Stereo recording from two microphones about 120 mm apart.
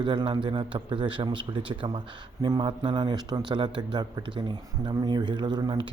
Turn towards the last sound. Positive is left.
turn(degrees=-35)  # may be behind; listen again after turning